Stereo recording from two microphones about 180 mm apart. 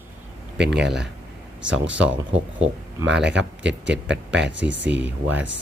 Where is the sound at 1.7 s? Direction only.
90° right.